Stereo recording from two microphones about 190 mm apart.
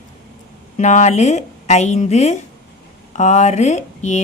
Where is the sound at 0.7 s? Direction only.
40° left (ahead or behind).